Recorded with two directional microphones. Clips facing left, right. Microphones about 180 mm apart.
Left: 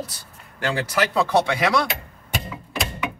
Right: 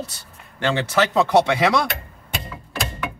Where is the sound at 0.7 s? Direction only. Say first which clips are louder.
Right 3 dB; 25° right (ahead or behind).